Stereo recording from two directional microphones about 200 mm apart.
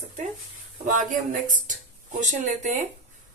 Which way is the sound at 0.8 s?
40° right (ahead or behind).